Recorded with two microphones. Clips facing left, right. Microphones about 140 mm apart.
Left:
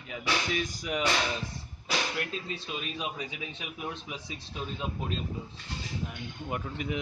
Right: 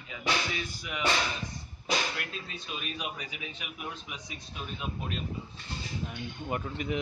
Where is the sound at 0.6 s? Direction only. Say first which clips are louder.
Left 5 dB; 40° left (ahead or behind).